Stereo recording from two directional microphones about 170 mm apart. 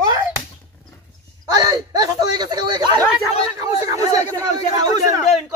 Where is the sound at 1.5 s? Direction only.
20° right (ahead or behind).